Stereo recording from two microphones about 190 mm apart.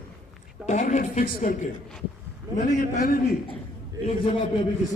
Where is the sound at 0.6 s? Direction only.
40° left (ahead or behind).